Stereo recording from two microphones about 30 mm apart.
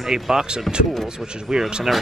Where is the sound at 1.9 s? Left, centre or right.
Centre.